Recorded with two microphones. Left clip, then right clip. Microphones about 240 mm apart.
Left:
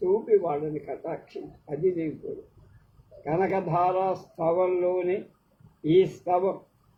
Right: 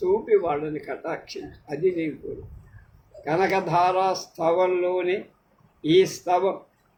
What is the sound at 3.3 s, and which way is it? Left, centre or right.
Speech, right.